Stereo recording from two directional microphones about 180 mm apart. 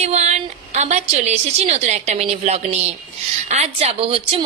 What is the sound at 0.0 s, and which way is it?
A woman's voice, 40° right (ahead or behind).